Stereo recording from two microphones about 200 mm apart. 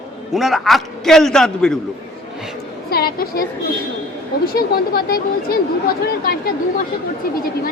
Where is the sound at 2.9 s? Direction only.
50° left (ahead or behind).